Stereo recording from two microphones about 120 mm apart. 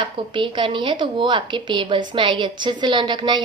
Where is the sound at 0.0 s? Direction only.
45° right (ahead or behind).